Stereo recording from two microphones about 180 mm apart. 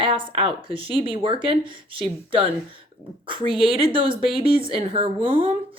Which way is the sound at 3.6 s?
30° right (ahead or behind).